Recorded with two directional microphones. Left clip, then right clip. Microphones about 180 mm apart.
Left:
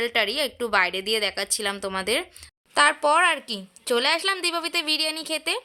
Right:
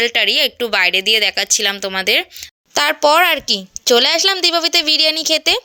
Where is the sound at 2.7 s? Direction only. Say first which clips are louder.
Right 6 dB; 35° right (ahead or behind).